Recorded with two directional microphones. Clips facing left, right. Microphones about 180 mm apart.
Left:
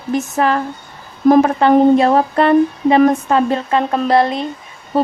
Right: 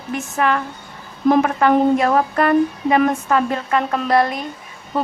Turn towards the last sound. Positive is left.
turn(degrees=30)  # may be behind; listen again after turning